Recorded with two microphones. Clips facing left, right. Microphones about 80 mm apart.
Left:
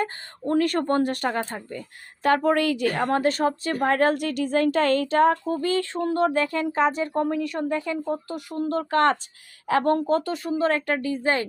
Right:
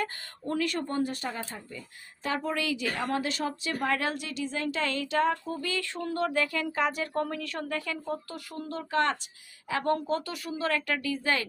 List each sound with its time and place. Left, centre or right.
0.0 s a woman's voice: left
8.8 s a woman's voice: left